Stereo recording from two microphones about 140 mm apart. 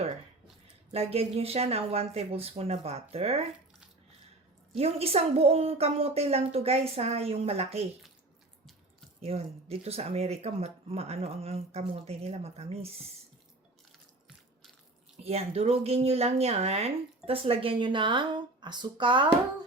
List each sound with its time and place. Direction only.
0.9 s speech: 45° right (ahead or behind)
4.8 s speech: 45° right (ahead or behind)
9.2 s speech: 45° right (ahead or behind)
15.2 s speech: 45° right (ahead or behind)